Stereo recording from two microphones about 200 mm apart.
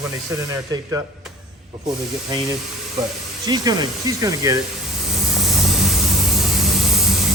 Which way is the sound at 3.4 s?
20° right (ahead or behind).